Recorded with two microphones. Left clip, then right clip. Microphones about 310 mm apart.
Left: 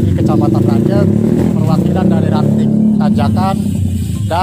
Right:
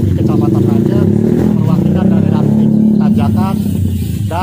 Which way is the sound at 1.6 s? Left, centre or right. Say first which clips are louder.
Even; left.